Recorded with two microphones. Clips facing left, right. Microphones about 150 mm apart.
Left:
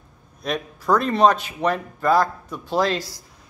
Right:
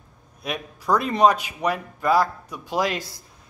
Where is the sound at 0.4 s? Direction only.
10° right (ahead or behind).